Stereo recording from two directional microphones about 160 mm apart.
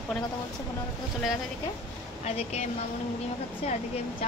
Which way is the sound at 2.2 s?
40° left (ahead or behind).